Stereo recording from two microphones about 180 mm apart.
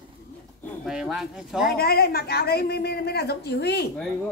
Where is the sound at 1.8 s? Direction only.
55° left (ahead or behind).